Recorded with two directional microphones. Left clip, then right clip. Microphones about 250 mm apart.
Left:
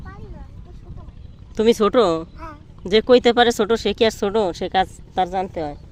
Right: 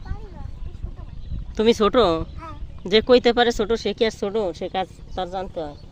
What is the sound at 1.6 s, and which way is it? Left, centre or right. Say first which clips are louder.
Speech: left 2 dB; centre.